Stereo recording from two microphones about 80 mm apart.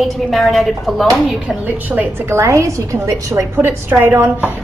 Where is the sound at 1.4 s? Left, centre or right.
Centre.